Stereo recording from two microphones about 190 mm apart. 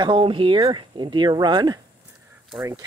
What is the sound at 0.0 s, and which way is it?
Speech, 25° right (ahead or behind).